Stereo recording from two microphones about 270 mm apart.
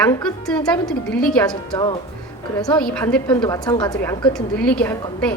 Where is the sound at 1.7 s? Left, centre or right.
Centre.